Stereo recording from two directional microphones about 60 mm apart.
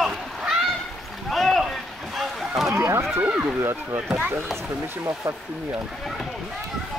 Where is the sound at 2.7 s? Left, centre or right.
Right.